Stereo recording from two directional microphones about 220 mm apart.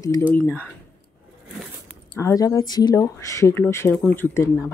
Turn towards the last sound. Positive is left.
turn(degrees=10)  # may be behind; listen again after turning